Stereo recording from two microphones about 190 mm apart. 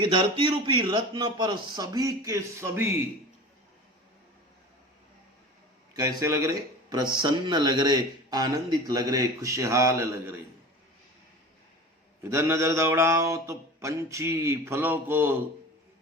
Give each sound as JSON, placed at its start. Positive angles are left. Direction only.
{"t": 0.0, "sound": "speech", "side_deg": -25}
{"t": 5.9, "sound": "speech", "side_deg": -20}
{"t": 12.2, "sound": "mantra", "side_deg": -10}